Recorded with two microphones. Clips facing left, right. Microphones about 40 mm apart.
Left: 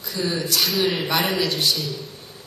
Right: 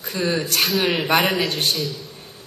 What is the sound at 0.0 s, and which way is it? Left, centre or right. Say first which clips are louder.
A man's voice: right 3 dB; right.